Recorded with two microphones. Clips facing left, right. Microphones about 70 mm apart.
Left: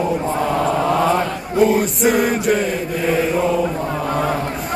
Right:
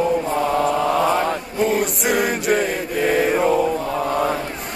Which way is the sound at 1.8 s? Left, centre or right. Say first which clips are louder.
Left 3 dB; centre.